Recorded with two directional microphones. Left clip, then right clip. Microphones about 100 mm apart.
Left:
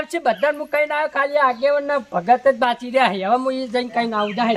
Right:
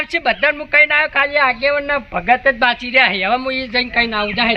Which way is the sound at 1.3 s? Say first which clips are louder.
Even; 55° left (ahead or behind).